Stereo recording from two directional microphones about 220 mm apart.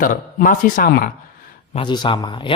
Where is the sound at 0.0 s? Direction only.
40° left (ahead or behind).